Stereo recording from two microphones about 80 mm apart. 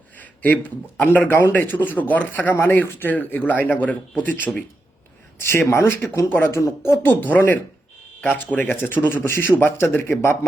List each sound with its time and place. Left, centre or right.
0.2 s a man's voice: centre
5.5 s a man's voice: left
7.0 s a man's voice: left